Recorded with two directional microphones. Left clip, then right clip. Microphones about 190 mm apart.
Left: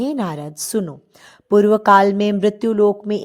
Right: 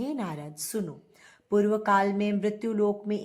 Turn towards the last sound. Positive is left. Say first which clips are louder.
# left 11 dB
turn(degrees=40)  # may be behind; listen again after turning